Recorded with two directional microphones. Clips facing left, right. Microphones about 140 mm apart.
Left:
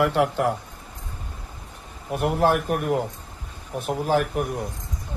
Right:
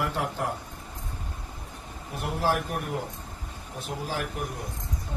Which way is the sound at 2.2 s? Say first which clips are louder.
Left 7 dB; 60° left (ahead or behind).